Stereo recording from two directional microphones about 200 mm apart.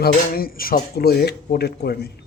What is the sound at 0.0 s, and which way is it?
Speech, 50° left (ahead or behind).